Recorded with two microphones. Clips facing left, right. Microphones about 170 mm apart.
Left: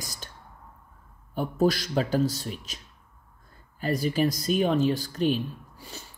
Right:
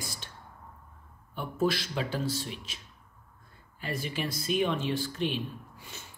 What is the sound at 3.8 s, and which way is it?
Speech, 40° left (ahead or behind).